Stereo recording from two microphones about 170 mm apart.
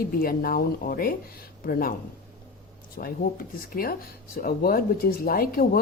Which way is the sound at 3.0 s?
60° left (ahead or behind).